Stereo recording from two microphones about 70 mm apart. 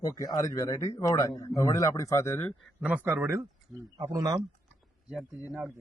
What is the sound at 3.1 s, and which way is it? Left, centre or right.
Speech, right.